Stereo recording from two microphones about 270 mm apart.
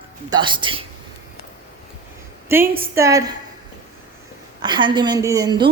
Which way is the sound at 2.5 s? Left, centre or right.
Centre.